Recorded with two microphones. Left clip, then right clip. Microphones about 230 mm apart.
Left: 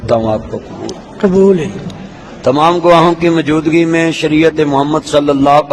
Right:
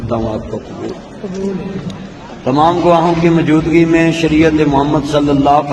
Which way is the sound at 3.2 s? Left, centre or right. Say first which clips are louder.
Left 1 dB; left.